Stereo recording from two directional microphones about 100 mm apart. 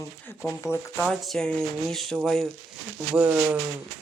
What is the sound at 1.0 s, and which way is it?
Speech, 5° left (ahead or behind).